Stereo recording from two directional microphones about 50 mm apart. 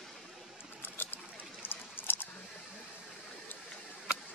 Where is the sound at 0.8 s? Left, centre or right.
Left.